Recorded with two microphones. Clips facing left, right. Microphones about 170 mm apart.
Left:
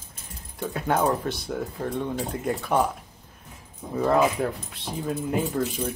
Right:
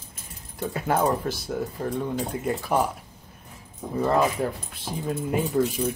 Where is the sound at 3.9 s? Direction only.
Centre (ahead or behind).